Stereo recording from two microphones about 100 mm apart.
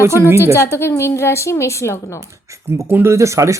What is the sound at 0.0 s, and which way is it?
Speech, 25° right (ahead or behind).